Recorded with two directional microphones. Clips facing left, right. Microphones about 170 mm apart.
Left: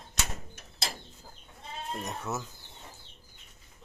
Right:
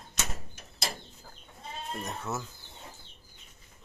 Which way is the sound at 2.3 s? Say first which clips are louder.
Even; 20° left (ahead or behind).